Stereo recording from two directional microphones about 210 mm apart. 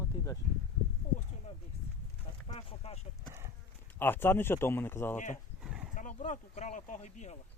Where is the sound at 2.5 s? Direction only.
25° left (ahead or behind).